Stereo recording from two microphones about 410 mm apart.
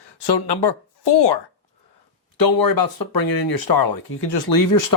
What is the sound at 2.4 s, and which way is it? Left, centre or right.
Speech, left.